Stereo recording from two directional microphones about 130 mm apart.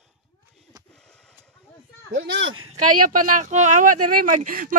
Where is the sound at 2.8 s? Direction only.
90° right.